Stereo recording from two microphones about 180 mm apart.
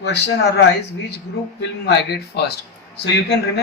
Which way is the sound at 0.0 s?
65° left (ahead or behind).